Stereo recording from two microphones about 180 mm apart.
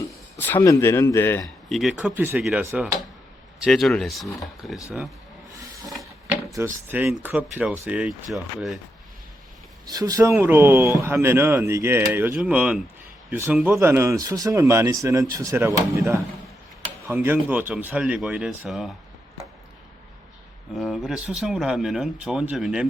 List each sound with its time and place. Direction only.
0.3 s speech: 10° left (ahead or behind)
1.7 s speech: centre (ahead or behind)
6.8 s speech: 10° right (ahead or behind)
9.9 s speech: 20° right (ahead or behind); by 18.9 s 5° right (ahead or behind)
20.7 s speech: centre (ahead or behind)